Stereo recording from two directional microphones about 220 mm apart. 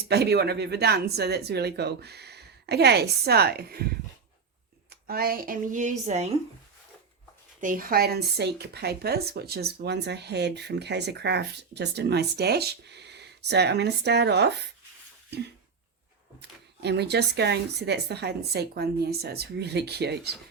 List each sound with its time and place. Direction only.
0.1 s speech: 50° right (ahead or behind)
5.0 s a woman's voice: 45° right (ahead or behind)
7.6 s speech: 40° right (ahead or behind)
15.3 s a sound: 50° right (ahead or behind)
16.4 s speech: 50° right (ahead or behind)